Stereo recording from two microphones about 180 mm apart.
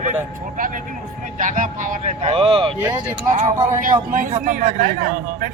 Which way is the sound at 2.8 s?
15° right (ahead or behind).